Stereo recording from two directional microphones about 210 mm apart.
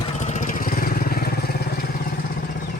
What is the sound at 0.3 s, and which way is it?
Vehicle, 35° left (ahead or behind).